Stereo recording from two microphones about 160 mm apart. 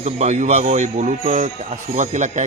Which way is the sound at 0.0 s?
45° right (ahead or behind).